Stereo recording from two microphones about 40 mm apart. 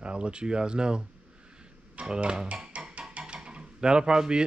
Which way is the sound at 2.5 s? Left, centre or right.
Right.